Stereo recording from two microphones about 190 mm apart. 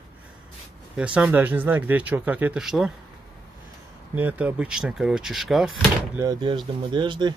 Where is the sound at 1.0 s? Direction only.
5° right (ahead or behind).